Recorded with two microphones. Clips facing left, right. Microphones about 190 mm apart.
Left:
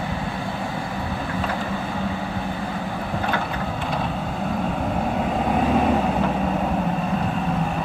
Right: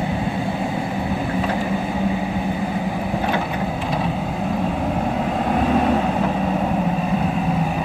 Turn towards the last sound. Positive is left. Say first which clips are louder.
# right 1 dB
turn(degrees=0)  # may be behind; listen again after turning